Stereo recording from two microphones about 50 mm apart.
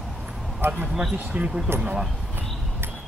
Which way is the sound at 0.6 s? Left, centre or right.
Right.